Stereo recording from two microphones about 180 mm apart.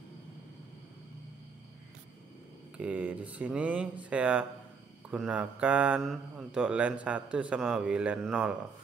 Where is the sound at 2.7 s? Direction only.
10° right (ahead or behind).